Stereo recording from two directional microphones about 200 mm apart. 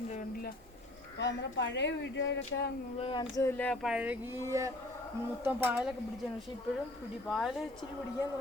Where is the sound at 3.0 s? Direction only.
25° left (ahead or behind).